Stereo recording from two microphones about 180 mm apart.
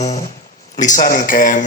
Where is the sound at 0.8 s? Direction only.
45° left (ahead or behind).